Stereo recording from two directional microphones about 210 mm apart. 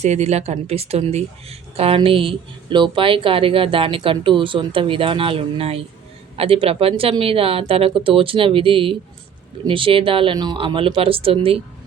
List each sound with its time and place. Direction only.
0.0 s speech: 30° right (ahead or behind)